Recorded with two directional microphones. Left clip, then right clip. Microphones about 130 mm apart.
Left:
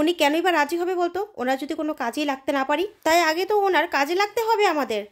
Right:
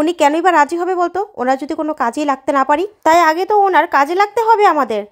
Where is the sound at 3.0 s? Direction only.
25° right (ahead or behind).